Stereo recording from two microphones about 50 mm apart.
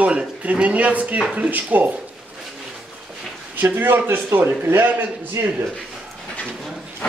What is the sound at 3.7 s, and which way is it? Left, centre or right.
A man's voice, right.